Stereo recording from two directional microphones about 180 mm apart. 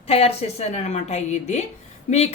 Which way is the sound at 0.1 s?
35° left (ahead or behind).